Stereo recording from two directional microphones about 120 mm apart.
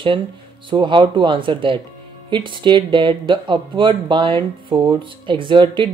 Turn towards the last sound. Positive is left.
turn(degrees=-45)  # may be behind; listen again after turning